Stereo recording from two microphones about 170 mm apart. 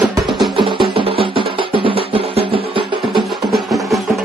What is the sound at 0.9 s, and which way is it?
Music, 30° right (ahead or behind).